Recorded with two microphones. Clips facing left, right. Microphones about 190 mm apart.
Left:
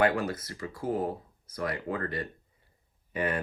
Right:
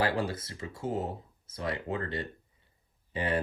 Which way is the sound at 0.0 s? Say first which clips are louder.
Left 3 dB; 30° right (ahead or behind).